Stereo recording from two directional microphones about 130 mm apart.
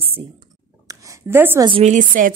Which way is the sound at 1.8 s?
75° right (ahead or behind).